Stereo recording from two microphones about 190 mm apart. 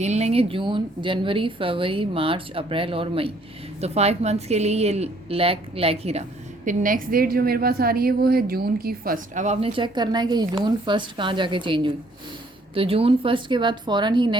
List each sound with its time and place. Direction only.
0.0 s a woman's voice: 35° right (ahead or behind)
6.7 s a woman's voice: 45° right (ahead or behind); by 14.3 s 25° right (ahead or behind)